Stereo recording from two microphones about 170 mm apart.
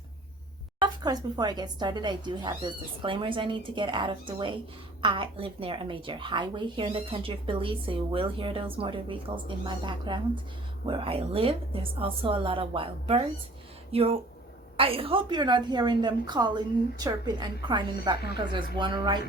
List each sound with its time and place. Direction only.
0.8 s a woman's voice: 25° right (ahead or behind)